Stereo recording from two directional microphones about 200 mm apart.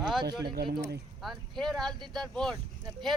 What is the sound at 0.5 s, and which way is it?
Speech, 50° right (ahead or behind).